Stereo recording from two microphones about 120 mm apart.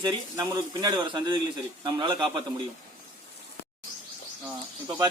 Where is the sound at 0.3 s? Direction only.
35° right (ahead or behind).